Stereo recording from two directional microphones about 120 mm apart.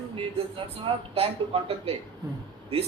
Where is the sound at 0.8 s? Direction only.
55° right (ahead or behind).